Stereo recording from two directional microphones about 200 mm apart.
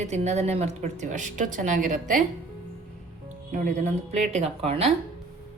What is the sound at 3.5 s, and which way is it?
A woman's voice, 35° right (ahead or behind).